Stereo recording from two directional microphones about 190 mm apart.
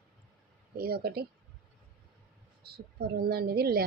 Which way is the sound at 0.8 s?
55° right (ahead or behind).